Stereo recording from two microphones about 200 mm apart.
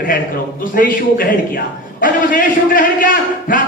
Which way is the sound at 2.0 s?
45° left (ahead or behind).